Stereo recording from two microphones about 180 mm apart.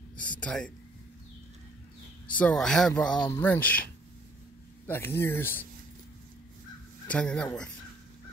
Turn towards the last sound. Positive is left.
turn(degrees=5)  # may be behind; listen again after turning